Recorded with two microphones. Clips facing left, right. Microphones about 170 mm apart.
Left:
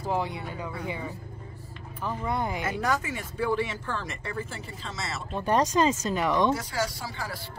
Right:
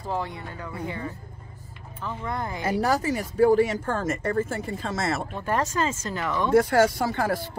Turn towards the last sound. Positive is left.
turn(degrees=-50)  # may be behind; listen again after turning